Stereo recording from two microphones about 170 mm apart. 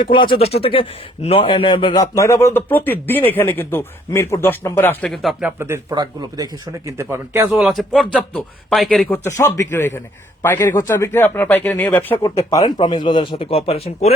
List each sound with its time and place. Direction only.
0.0 s a man's voice: 30° left (ahead or behind); by 5.5 s centre (ahead or behind)
5.5 s speech: 15° right (ahead or behind)
7.5 s a man's voice: centre (ahead or behind)
9.0 s a man's voice: 15° left (ahead or behind)
12.5 s speech: 20° left (ahead or behind)